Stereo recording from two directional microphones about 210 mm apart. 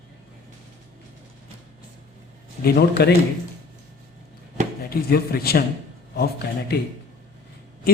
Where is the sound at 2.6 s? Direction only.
50° left (ahead or behind).